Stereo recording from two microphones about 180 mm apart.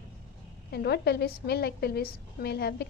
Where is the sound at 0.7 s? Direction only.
65° left (ahead or behind).